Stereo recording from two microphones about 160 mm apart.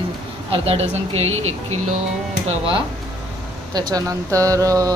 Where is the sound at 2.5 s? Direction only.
35° right (ahead or behind).